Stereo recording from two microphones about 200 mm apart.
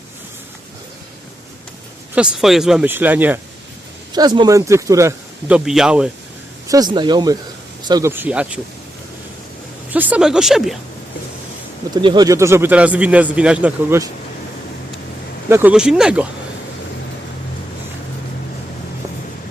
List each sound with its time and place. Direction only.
2.1 s speech: 5° right (ahead or behind)
4.1 s speech: 20° right (ahead or behind); by 6.1 s 5° right (ahead or behind)
6.7 s speech: 20° right (ahead or behind)
9.9 s speech: 10° right (ahead or behind)
11.9 s speech: 20° right (ahead or behind)
15.4 s speech: 10° right (ahead or behind)